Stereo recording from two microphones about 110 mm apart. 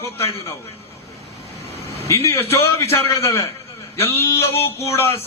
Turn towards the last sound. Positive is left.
turn(degrees=25)  # may be behind; listen again after turning